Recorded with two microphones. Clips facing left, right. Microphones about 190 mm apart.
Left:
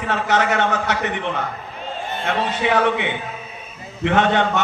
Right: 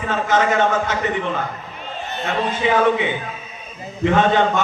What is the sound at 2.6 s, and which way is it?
A man's voice, 65° left (ahead or behind).